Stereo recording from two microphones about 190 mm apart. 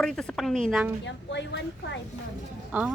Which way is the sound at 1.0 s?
70° left (ahead or behind).